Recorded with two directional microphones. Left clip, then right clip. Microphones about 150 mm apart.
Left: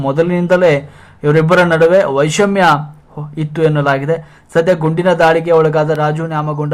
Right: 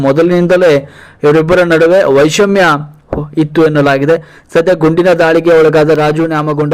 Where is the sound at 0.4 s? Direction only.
20° right (ahead or behind).